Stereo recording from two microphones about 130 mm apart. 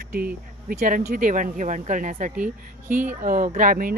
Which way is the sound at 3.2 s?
90° right.